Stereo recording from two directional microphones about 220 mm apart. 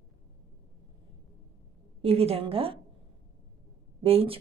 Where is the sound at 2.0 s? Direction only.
25° right (ahead or behind).